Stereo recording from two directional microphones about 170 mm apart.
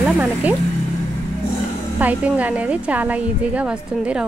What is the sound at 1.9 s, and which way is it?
A woman's voice, 10° right (ahead or behind).